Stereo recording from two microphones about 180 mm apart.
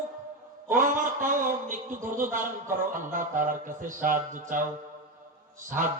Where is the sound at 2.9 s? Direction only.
50° right (ahead or behind).